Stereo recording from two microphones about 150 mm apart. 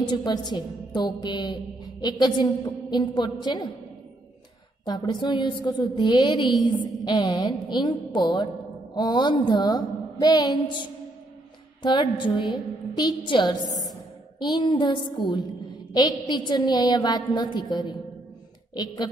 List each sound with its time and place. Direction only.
0.0 s a woman's voice: 30° left (ahead or behind)
4.8 s a woman's voice: 30° left (ahead or behind)